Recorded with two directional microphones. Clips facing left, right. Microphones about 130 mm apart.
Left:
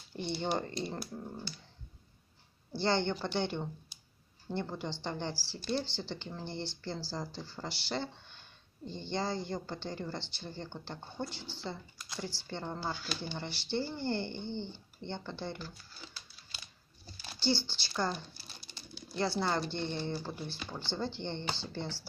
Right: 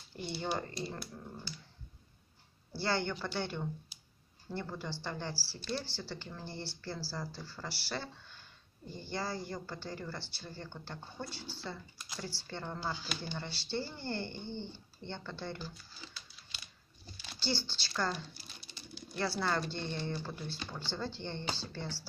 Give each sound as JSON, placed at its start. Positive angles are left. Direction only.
{"t": 0.1, "sound": "speech", "side_deg": 20}
{"t": 2.7, "sound": "speech", "side_deg": 20}
{"t": 17.4, "sound": "speech", "side_deg": 15}
{"t": 19.1, "sound": "speech", "side_deg": 20}